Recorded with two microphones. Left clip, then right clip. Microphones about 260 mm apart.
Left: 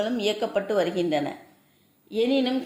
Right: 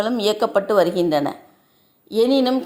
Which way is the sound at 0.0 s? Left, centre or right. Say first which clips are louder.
Right 6 dB; right.